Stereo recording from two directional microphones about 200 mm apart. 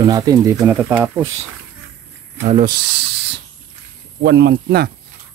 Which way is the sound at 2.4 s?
35° right (ahead or behind).